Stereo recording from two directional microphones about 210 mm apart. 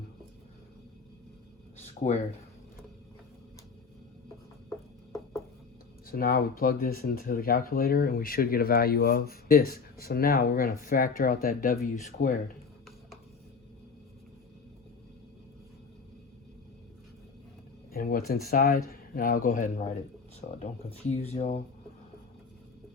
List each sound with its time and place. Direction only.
2.0 s speech: 35° left (ahead or behind)
6.1 s speech: 45° left (ahead or behind)
17.9 s a sound: 40° left (ahead or behind)
18.5 s speech: 45° left (ahead or behind)